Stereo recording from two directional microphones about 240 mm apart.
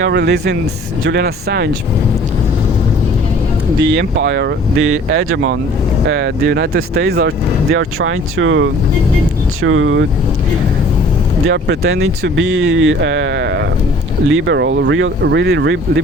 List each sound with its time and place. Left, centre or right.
0.0 s speech: right
3.9 s speech: right
4.8 s speech: right
6.1 s speech: right
7.7 s speech: right
11.4 s speech: right